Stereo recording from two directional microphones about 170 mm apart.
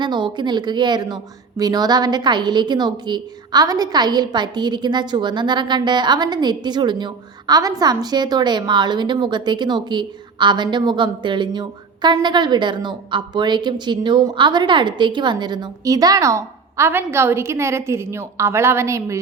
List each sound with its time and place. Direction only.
0.0 s a woman's voice: 25° right (ahead or behind)